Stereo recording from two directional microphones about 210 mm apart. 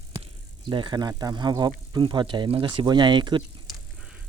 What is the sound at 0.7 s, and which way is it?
Speech, 20° right (ahead or behind).